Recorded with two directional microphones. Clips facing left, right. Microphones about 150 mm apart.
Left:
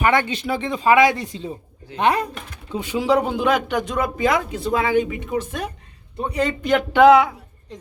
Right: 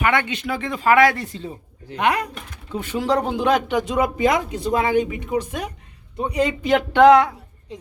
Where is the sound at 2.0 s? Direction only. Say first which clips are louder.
Left 2 dB; 30° left (ahead or behind).